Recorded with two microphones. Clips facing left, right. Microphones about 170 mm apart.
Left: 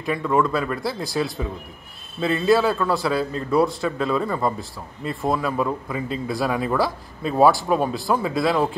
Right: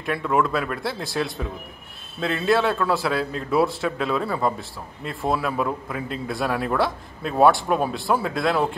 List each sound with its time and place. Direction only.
0.0 s a man's voice: 5° right (ahead or behind)